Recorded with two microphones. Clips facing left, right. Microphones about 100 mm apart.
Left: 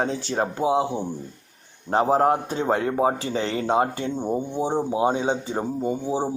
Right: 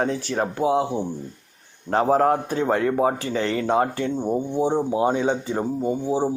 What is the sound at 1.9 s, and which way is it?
Speech, 25° left (ahead or behind).